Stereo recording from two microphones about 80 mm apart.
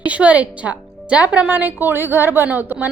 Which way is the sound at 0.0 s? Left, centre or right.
Centre.